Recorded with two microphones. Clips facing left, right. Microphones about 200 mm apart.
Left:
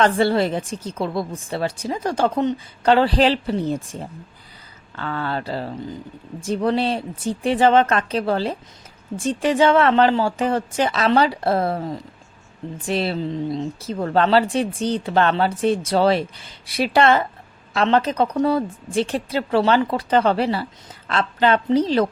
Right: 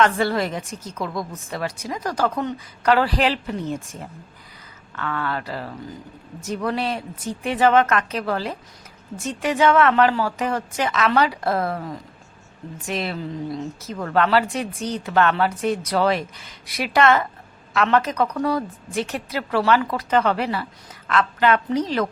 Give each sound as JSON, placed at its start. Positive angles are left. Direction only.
{"t": 0.0, "sound": "a woman's voice", "side_deg": 30}